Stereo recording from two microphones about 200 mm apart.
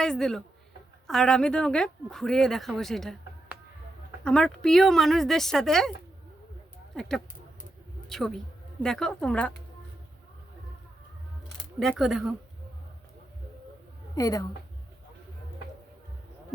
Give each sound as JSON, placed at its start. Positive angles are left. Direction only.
{"t": 0.0, "sound": "speech", "side_deg": 0}
{"t": 6.9, "sound": "speech", "side_deg": 0}
{"t": 11.8, "sound": "speech", "side_deg": 0}
{"t": 14.2, "sound": "a woman's voice", "side_deg": 20}